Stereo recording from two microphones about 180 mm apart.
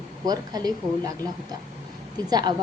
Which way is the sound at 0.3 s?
20° right (ahead or behind).